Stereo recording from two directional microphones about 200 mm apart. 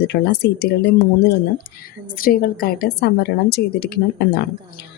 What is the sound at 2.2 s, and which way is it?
Speech, 45° left (ahead or behind).